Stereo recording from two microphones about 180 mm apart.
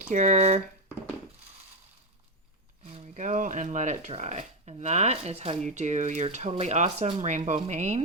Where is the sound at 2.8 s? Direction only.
35° right (ahead or behind).